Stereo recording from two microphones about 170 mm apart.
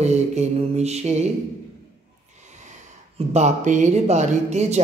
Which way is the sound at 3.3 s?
45° right (ahead or behind).